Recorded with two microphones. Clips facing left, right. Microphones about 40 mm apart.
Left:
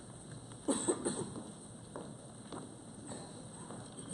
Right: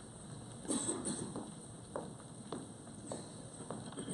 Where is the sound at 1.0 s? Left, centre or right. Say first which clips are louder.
Left 4 dB; left.